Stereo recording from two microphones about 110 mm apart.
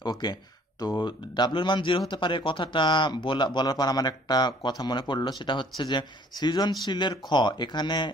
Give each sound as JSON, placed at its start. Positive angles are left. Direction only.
{"t": 0.0, "sound": "speech", "side_deg": 40}